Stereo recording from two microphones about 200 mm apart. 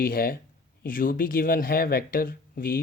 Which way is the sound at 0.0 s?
45° left (ahead or behind).